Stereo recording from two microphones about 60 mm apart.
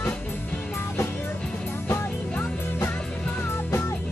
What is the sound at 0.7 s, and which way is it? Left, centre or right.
Music, left.